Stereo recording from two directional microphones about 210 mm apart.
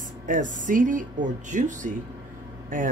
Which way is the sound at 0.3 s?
35° right (ahead or behind).